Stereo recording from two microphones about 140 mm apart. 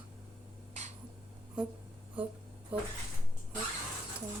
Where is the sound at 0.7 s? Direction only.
55° right (ahead or behind).